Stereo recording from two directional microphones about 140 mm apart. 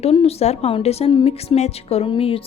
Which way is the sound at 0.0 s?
45° left (ahead or behind).